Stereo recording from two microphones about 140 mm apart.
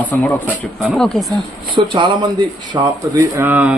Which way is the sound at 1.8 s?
35° right (ahead or behind).